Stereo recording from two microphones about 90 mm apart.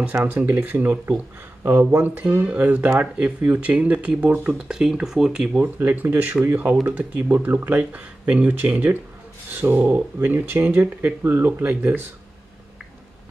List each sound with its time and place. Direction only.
0.1 s speech: 20° right (ahead or behind)
5.8 s speech: 20° right (ahead or behind)